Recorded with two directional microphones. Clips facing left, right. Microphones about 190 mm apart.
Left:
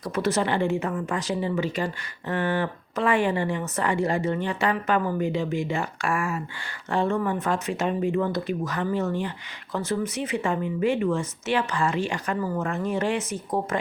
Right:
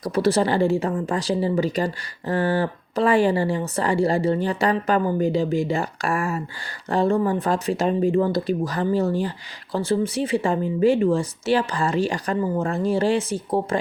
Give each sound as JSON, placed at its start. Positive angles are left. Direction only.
{"t": 0.0, "sound": "speech", "side_deg": -35}